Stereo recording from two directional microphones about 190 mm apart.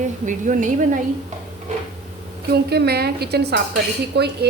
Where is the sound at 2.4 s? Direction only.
60° right (ahead or behind).